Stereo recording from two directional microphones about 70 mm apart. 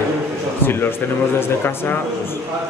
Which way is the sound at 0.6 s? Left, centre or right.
Left.